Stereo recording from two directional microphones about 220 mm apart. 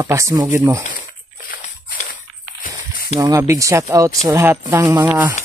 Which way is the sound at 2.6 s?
40° left (ahead or behind).